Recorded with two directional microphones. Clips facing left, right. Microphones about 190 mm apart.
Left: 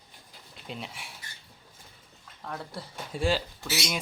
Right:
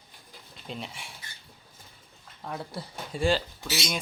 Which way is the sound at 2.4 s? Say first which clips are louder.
Right 2 dB; 5° right (ahead or behind).